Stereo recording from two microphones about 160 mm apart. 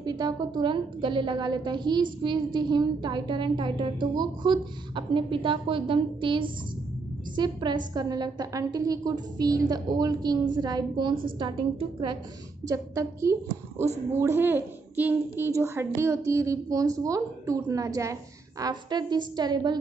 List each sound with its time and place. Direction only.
0.0 s a woman's voice: 25° right (ahead or behind)
12.6 s a woman's voice: 20° right (ahead or behind)